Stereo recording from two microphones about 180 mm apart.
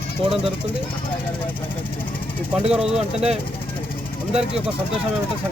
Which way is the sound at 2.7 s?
5° right (ahead or behind).